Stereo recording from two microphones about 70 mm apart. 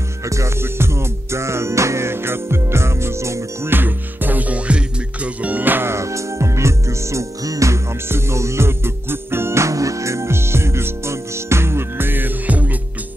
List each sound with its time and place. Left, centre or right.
0.3 s music: right
3.7 s music: right